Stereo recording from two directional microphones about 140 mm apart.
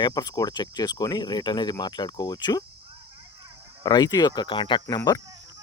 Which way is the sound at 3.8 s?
30° left (ahead or behind).